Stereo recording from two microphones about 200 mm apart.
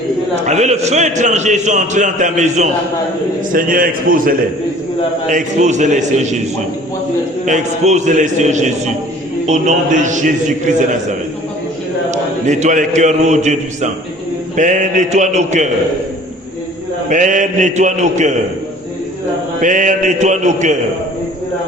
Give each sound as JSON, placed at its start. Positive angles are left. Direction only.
{"t": 0.4, "sound": "a man's voice", "side_deg": -35}
{"t": 7.4, "sound": "a man's voice", "side_deg": -35}
{"t": 12.1, "sound": "a man's voice", "side_deg": -35}
{"t": 17.1, "sound": "a man's voice", "side_deg": -40}
{"t": 19.6, "sound": "a man's voice", "side_deg": -40}